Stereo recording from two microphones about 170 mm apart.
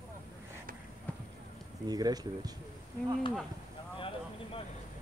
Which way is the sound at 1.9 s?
25° right (ahead or behind).